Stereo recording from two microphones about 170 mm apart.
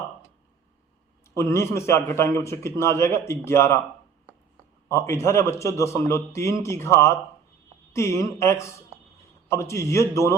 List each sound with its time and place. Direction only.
1.3 s a man's voice: 15° left (ahead or behind)
4.9 s a man's voice: 15° left (ahead or behind)